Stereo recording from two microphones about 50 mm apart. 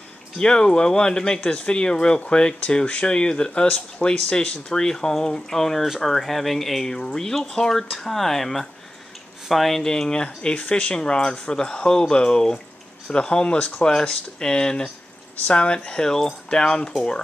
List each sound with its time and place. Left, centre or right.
0.4 s speech: centre